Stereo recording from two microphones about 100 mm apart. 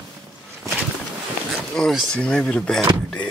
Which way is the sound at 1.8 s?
5° left (ahead or behind).